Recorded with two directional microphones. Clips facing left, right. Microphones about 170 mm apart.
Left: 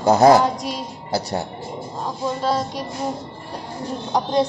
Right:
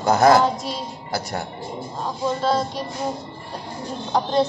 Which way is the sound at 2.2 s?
10° left (ahead or behind).